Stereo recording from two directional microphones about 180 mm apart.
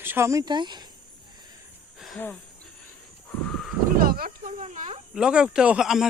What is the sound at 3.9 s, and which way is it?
Speech, 55° right (ahead or behind).